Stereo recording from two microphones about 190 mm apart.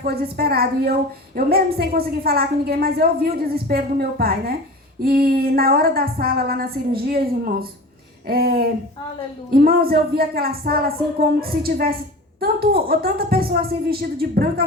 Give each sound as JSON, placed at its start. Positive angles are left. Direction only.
{"t": 0.0, "sound": "a woman's voice", "side_deg": -55}